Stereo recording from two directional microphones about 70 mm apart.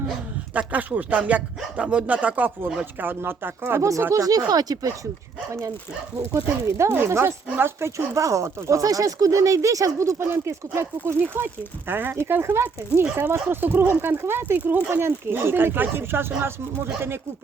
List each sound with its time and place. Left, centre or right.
0.5 s speech: right
3.0 s speech: right
4.1 s speech: right
5.5 s speech: right
11.9 s speech: right